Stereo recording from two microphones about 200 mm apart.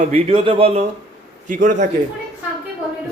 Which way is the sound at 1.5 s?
40° right (ahead or behind).